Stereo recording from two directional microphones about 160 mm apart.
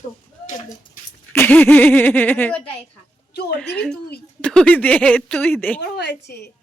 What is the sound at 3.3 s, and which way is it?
Speech, 90° left.